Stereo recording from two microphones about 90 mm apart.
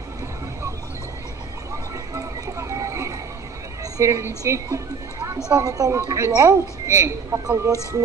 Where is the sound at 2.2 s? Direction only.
35° right (ahead or behind).